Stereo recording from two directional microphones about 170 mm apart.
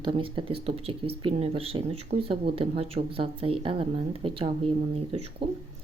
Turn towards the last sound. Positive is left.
turn(degrees=-35)  # may be behind; listen again after turning